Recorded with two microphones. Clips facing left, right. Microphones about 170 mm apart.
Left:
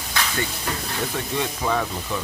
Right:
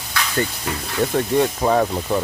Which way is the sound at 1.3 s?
40° right (ahead or behind).